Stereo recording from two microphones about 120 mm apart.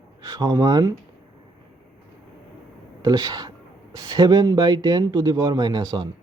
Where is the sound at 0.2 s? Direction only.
30° right (ahead or behind).